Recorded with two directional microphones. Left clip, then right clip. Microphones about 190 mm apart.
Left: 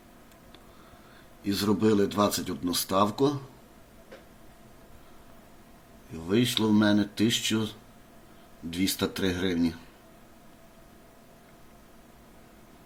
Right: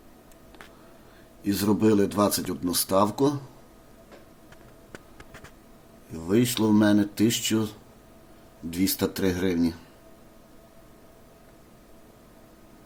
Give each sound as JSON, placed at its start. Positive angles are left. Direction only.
{"t": 1.5, "sound": "speech", "side_deg": -20}
{"t": 6.2, "sound": "speech", "side_deg": -15}
{"t": 8.7, "sound": "speech", "side_deg": -15}